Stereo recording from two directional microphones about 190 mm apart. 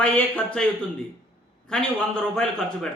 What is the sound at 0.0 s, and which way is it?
A man's voice, 5° left (ahead or behind).